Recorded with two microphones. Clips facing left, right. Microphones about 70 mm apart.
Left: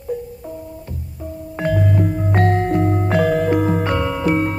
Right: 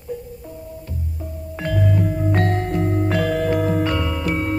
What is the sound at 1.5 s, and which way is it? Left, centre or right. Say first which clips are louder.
Music: left 3 dB; left.